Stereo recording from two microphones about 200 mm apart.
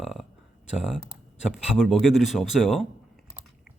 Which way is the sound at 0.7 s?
5° right (ahead or behind).